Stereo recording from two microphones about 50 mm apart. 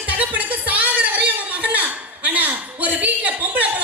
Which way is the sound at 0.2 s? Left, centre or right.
Right.